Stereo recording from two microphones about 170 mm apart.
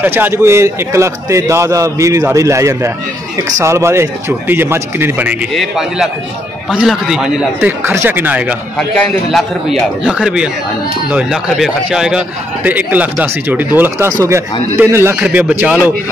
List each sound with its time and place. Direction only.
0.0 s a man's voice: 10° right (ahead or behind)
5.5 s a man's voice: centre (ahead or behind)
7.8 s a man's voice: 15° right (ahead or behind)
8.7 s a man's voice: 5° left (ahead or behind)